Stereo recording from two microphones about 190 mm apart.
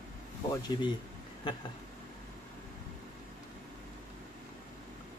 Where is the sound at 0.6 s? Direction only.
25° left (ahead or behind).